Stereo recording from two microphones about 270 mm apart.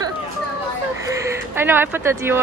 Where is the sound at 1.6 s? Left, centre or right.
Centre.